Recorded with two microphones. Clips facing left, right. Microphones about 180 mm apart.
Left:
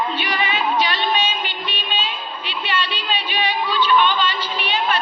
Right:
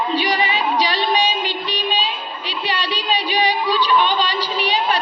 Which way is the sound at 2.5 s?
35° right (ahead or behind).